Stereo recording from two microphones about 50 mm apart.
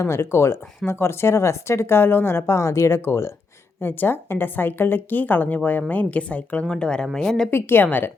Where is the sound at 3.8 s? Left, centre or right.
Left.